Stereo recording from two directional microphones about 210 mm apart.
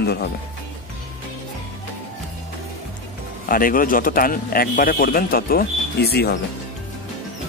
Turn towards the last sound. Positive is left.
turn(degrees=50)  # may be behind; listen again after turning